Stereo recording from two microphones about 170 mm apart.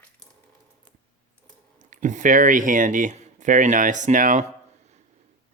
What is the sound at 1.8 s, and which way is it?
Speech, 45° right (ahead or behind).